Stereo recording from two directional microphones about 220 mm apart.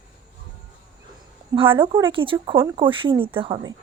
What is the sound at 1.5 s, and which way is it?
Speech, 20° right (ahead or behind).